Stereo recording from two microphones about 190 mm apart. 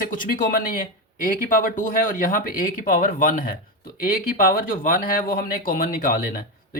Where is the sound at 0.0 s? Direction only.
45° left (ahead or behind).